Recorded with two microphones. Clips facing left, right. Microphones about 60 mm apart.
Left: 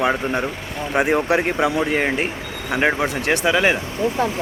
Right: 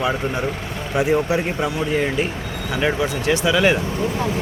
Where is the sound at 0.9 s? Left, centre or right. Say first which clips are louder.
Left 1 dB; left.